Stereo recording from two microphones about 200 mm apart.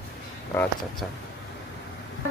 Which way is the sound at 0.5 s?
10° left (ahead or behind).